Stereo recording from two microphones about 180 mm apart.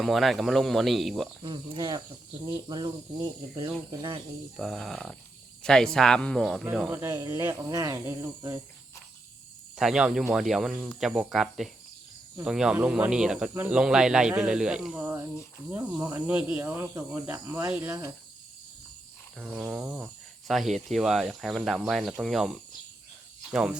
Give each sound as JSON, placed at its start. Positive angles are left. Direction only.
{"t": 0.0, "sound": "speech", "side_deg": 0}
{"t": 1.4, "sound": "speech", "side_deg": -25}
{"t": 4.5, "sound": "speech", "side_deg": 0}
{"t": 6.9, "sound": "speech", "side_deg": -15}
{"t": 9.7, "sound": "speech", "side_deg": -5}
{"t": 19.4, "sound": "speech", "side_deg": -5}